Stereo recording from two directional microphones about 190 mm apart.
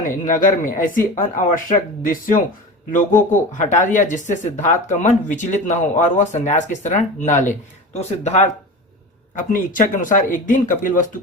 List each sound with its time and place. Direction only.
0.0 s speech: 45° left (ahead or behind)
9.5 s speech: 45° left (ahead or behind)